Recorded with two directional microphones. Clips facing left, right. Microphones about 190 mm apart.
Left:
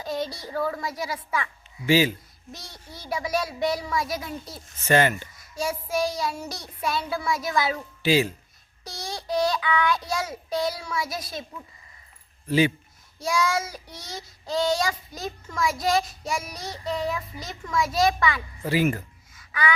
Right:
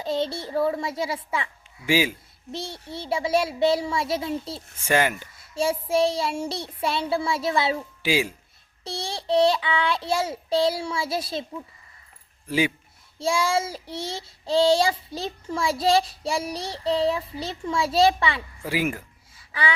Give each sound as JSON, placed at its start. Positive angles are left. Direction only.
{"t": 0.0, "sound": "child singing", "side_deg": -25}
{"t": 1.9, "sound": "speech", "side_deg": -10}
{"t": 2.5, "sound": "child singing", "side_deg": -25}
{"t": 4.8, "sound": "speech", "side_deg": -10}
{"t": 5.4, "sound": "child singing", "side_deg": -30}
{"t": 8.0, "sound": "speech", "side_deg": -10}
{"t": 8.8, "sound": "child singing", "side_deg": -30}
{"t": 12.5, "sound": "speech", "side_deg": -10}
{"t": 13.1, "sound": "child singing", "side_deg": -30}
{"t": 18.6, "sound": "speech", "side_deg": -10}
{"t": 19.4, "sound": "gasp", "side_deg": -30}